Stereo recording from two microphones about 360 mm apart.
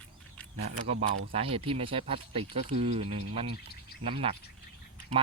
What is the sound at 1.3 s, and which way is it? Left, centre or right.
Speech, centre.